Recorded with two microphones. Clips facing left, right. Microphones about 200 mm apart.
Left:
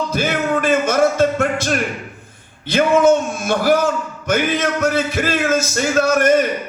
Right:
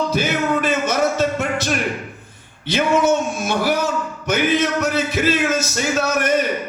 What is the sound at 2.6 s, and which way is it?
A man's voice, 50° left (ahead or behind).